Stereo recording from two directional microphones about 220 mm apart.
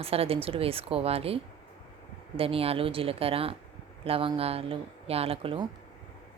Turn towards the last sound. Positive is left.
turn(degrees=-25)  # may be behind; listen again after turning